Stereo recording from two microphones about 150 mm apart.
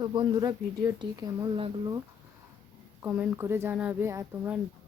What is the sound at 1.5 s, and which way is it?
Speech, 35° right (ahead or behind).